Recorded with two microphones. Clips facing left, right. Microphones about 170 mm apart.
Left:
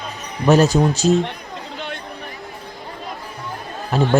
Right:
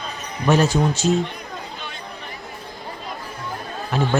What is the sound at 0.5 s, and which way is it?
Speech, 40° left (ahead or behind).